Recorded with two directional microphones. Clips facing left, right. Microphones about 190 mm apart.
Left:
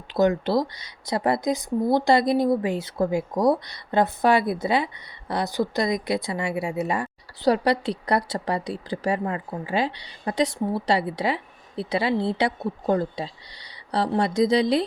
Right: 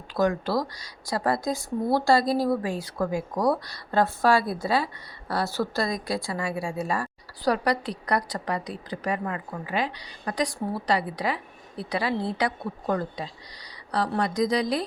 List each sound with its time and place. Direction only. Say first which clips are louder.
0.1 s speech: left 4 dB; 20° left (ahead or behind)